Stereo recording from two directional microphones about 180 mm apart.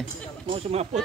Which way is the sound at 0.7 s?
35° right (ahead or behind).